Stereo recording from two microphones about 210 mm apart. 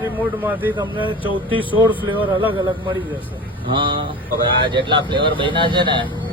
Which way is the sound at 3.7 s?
25° right (ahead or behind).